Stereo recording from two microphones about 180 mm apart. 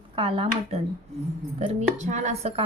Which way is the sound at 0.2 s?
30° right (ahead or behind).